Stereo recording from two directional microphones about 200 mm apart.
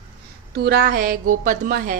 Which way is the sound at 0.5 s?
50° right (ahead or behind).